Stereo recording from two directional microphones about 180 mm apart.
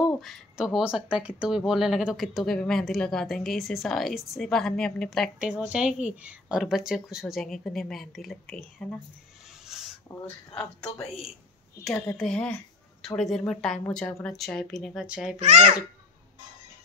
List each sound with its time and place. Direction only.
0.1 s speech: centre (ahead or behind)
9.7 s a sound: centre (ahead or behind)
10.0 s speech: 15° left (ahead or behind); by 15.3 s 5° right (ahead or behind)
15.3 s a child's voice: 40° right (ahead or behind)